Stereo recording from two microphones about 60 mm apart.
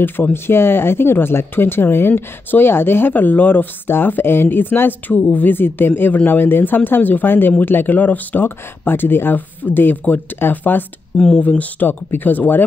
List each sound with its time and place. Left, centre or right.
0.0 s speech: left